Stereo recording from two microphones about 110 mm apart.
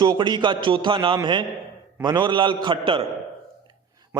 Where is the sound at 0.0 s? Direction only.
45° right (ahead or behind).